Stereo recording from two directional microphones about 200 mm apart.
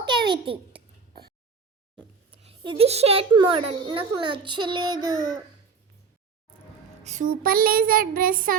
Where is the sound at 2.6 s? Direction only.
30° right (ahead or behind).